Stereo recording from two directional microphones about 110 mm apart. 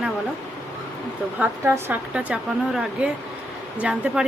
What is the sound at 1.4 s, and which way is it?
Speech, 20° right (ahead or behind).